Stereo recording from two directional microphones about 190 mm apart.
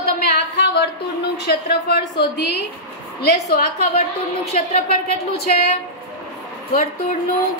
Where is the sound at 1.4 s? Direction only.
55° left (ahead or behind).